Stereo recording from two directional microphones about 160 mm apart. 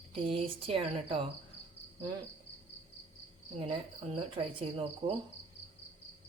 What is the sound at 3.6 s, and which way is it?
Speech, 35° right (ahead or behind).